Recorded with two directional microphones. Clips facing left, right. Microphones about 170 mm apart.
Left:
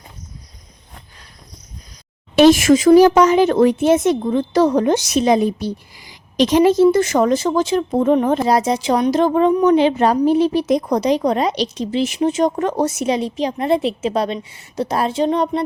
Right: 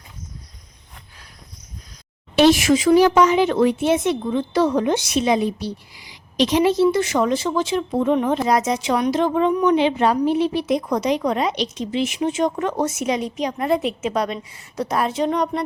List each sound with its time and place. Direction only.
2.3 s speech: 45° left (ahead or behind)
8.4 s a woman's voice: 30° left (ahead or behind)